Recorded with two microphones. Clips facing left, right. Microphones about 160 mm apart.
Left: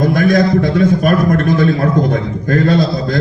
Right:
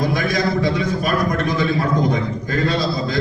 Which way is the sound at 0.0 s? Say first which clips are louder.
Left 8 dB; 50° left (ahead or behind).